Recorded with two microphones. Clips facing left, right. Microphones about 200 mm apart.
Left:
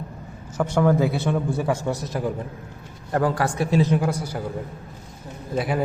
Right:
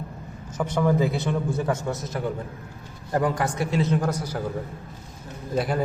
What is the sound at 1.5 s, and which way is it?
Speech, 10° left (ahead or behind).